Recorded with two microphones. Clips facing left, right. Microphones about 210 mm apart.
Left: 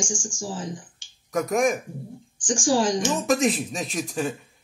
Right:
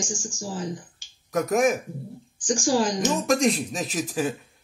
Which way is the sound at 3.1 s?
Centre (ahead or behind).